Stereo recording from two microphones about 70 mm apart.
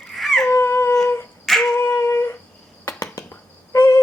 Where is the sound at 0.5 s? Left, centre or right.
Left.